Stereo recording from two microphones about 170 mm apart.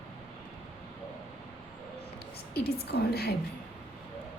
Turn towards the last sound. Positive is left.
turn(degrees=70)  # may be behind; listen again after turning